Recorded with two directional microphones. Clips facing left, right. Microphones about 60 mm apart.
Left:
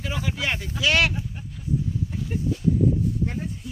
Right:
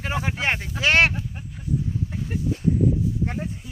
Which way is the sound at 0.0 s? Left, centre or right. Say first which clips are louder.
Right 3 dB; right.